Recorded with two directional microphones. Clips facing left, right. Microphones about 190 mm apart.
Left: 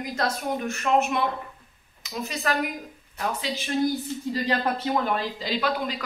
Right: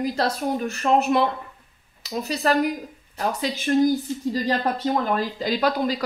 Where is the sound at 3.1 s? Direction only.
45° right (ahead or behind).